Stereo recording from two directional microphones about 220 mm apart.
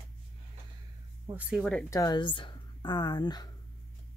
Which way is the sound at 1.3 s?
5° right (ahead or behind).